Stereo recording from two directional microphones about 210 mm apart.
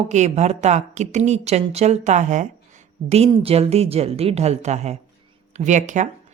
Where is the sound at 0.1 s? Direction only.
35° right (ahead or behind).